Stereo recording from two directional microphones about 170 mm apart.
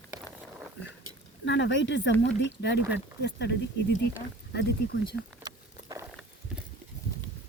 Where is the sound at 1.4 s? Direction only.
90° left.